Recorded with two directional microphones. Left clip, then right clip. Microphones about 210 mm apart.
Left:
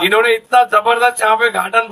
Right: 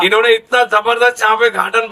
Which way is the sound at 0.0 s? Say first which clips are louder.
Right 2 dB; 50° left (ahead or behind).